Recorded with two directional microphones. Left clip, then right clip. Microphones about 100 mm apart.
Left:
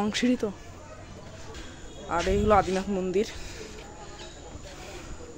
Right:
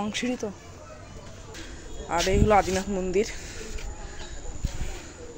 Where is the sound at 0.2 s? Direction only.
85° left.